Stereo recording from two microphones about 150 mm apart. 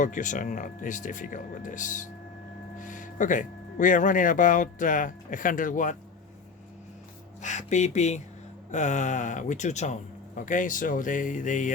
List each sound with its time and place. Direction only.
0.0 s speech: 60° left (ahead or behind)
7.4 s speech: 50° left (ahead or behind)